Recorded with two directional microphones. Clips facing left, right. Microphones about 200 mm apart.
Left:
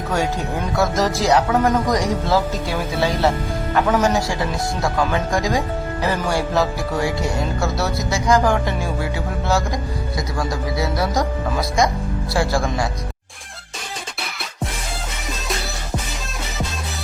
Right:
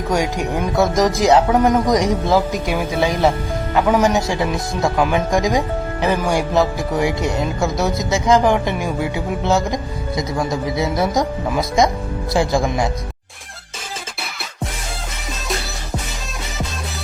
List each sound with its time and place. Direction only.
0.1 s speech: 15° right (ahead or behind)
12.3 s speech: 20° right (ahead or behind)